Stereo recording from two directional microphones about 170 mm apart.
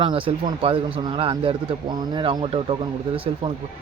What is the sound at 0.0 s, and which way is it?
Speech, 30° right (ahead or behind).